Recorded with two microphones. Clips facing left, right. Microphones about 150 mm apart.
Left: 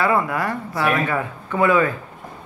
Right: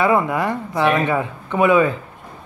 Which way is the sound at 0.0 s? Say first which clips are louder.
Right 3 dB; 20° right (ahead or behind).